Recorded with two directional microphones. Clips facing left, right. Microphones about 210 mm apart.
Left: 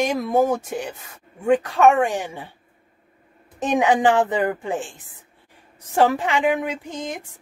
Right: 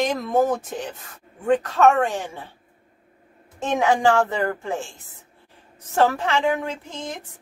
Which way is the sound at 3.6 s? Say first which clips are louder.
Left 2 dB; 15° left (ahead or behind).